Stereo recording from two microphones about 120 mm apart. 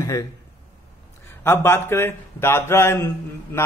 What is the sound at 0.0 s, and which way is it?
Speech, 30° left (ahead or behind).